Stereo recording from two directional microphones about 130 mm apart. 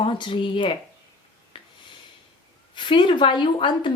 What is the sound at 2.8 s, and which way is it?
Speech, 40° left (ahead or behind).